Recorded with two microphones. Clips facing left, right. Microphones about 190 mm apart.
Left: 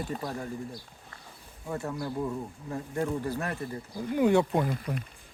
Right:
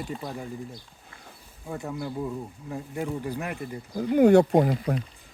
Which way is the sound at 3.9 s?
45° right (ahead or behind).